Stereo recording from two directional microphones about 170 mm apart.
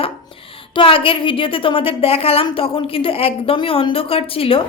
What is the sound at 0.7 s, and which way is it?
A woman's voice, 30° left (ahead or behind).